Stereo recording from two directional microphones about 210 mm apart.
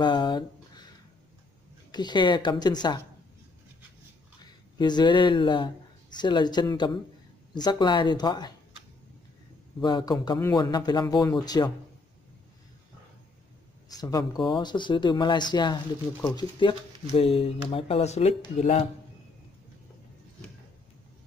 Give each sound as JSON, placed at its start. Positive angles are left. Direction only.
{"t": 0.0, "sound": "a sound", "side_deg": 20}
{"t": 1.9, "sound": "speech", "side_deg": 20}
{"t": 4.7, "sound": "speech", "side_deg": 20}
{"t": 9.8, "sound": "speech", "side_deg": 20}
{"t": 13.8, "sound": "speech", "side_deg": 15}